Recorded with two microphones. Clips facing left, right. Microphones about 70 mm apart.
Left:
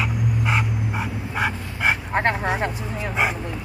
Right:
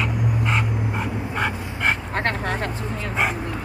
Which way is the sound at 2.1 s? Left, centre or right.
Centre.